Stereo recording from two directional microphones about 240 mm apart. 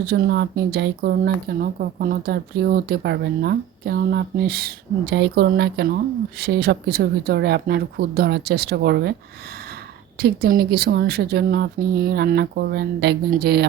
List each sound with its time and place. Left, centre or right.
0.0 s speech: right
10.2 s speech: right